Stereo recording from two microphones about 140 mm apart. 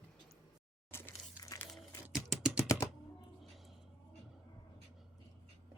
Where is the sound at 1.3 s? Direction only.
25° left (ahead or behind).